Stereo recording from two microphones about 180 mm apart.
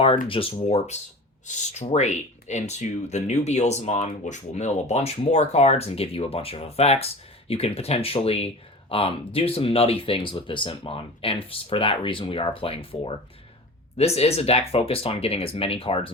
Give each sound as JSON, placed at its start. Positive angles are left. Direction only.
{"t": 0.3, "sound": "speech", "side_deg": 30}